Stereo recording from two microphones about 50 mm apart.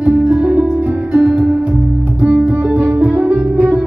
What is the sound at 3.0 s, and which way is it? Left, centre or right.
Music, right.